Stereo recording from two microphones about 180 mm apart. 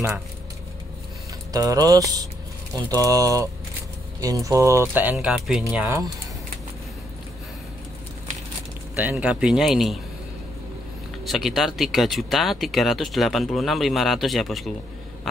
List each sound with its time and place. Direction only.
1.5 s mantra: 20° right (ahead or behind)
4.2 s speech: 20° right (ahead or behind); by 5.9 s 5° right (ahead or behind)
8.9 s speech: 5° right (ahead or behind)
11.2 s speech: centre (ahead or behind)